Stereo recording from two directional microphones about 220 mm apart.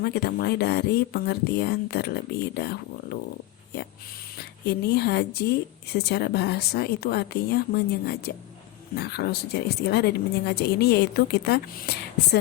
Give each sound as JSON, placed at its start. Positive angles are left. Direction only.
{"t": 0.0, "sound": "a woman's voice", "side_deg": 45}
{"t": 4.4, "sound": "a woman's voice", "side_deg": 50}